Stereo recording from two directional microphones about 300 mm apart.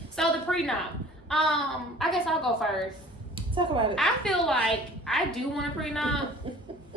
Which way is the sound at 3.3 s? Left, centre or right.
Centre.